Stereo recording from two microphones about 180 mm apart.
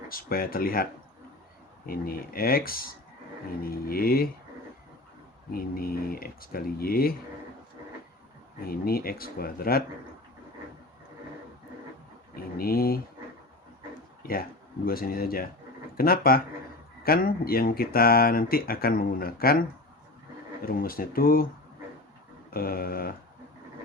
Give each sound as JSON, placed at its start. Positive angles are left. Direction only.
{"t": 0.1, "sound": "speech", "side_deg": 55}
{"t": 1.9, "sound": "speech", "side_deg": 55}
{"t": 5.5, "sound": "speech", "side_deg": 55}
{"t": 8.6, "sound": "speech", "side_deg": 55}
{"t": 12.4, "sound": "speech", "side_deg": 55}
{"t": 14.2, "sound": "a sound", "side_deg": 55}
{"t": 14.8, "sound": "speech", "side_deg": 55}
{"t": 20.7, "sound": "speech", "side_deg": 55}
{"t": 22.5, "sound": "speech", "side_deg": 55}